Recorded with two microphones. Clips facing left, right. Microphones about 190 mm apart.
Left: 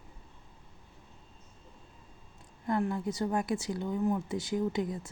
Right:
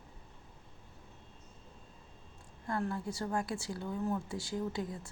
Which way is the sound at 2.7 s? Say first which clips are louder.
Left 5 dB; 20° left (ahead or behind).